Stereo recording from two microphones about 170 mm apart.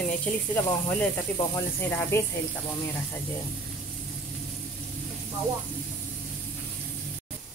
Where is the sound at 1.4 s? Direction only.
15° left (ahead or behind).